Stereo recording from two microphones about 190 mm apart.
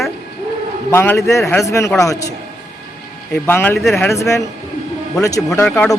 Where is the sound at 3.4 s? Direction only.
10° left (ahead or behind).